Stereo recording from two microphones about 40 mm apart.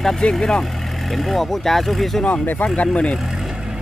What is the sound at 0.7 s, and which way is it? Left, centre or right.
Speech, centre.